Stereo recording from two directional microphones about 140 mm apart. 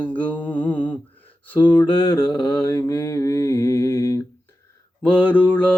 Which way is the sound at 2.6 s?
25° left (ahead or behind).